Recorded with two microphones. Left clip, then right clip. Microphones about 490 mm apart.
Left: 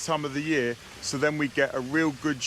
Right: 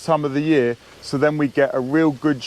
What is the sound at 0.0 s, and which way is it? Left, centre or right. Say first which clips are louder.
Speech: right 9 dB; right.